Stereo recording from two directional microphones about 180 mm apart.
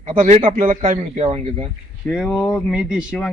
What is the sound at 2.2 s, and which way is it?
Speech, 10° left (ahead or behind).